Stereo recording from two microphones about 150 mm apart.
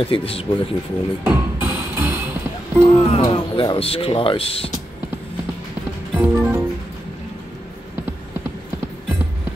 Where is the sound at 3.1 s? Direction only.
40° left (ahead or behind).